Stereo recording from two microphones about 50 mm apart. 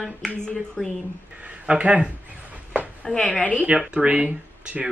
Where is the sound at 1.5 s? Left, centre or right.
Right.